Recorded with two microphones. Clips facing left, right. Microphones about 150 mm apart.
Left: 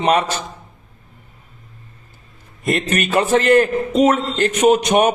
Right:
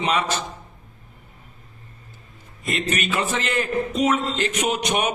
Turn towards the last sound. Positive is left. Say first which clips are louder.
# left 9 dB
turn(degrees=45)  # may be behind; listen again after turning